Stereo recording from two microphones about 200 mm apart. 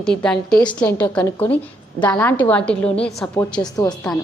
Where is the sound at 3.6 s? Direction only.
15° left (ahead or behind).